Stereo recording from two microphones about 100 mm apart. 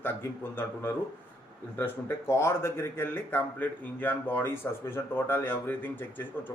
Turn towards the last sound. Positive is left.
turn(degrees=20)  # may be behind; listen again after turning